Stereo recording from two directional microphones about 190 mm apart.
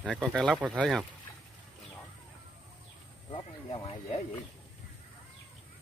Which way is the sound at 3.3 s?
25° left (ahead or behind).